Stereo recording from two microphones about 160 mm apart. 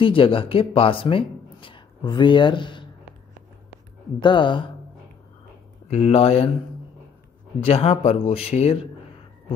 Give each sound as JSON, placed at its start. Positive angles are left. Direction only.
{"t": 0.0, "sound": "speech", "side_deg": 35}
{"t": 4.2, "sound": "speech", "side_deg": 30}
{"t": 5.9, "sound": "speech", "side_deg": 40}
{"t": 7.6, "sound": "speech", "side_deg": 40}